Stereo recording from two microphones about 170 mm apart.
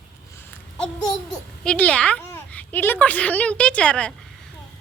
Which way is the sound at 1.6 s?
10° left (ahead or behind).